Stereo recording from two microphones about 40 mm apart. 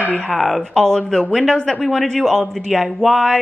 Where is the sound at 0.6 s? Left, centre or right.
Centre.